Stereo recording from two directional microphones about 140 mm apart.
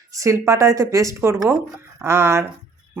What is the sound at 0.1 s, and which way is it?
Speech, 20° right (ahead or behind).